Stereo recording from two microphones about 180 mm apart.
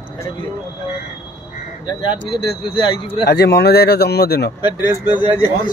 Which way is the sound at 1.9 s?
25° left (ahead or behind).